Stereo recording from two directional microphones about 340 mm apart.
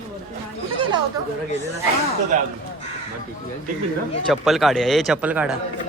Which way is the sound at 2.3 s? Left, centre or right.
Right.